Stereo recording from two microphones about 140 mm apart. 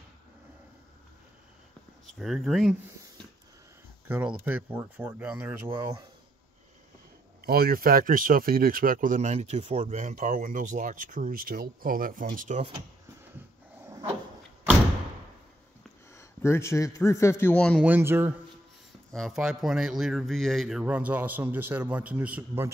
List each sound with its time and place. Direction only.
2.0 s a man's voice: centre (ahead or behind)
4.1 s speech: 10° right (ahead or behind)
7.4 s speech: 90° right; by 12.6 s 70° right (ahead or behind)
16.2 s a man's voice: 20° left (ahead or behind)
17.6 s a man's voice: 5° left (ahead or behind)
17.8 s speech: 15° right (ahead or behind)
19.1 s a man's voice: centre (ahead or behind)
20.8 s speech: 10° right (ahead or behind)